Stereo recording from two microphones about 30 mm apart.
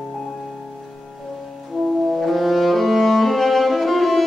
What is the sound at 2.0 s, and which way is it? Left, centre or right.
Music, centre.